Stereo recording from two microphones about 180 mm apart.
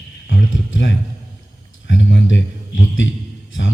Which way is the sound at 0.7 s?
90° left.